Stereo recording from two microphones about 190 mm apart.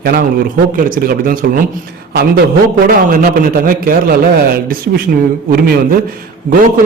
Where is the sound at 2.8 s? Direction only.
45° right (ahead or behind).